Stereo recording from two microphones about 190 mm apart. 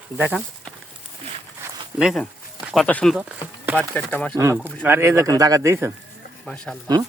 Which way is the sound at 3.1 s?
5° right (ahead or behind).